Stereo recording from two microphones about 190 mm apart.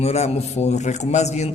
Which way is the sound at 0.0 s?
35° left (ahead or behind).